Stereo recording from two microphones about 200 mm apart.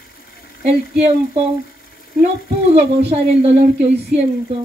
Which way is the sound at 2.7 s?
30° right (ahead or behind).